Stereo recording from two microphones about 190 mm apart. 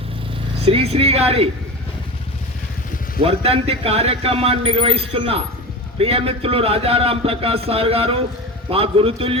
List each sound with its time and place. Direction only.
0.6 s a man's voice: 30° right (ahead or behind)
3.2 s a man's voice: 30° right (ahead or behind)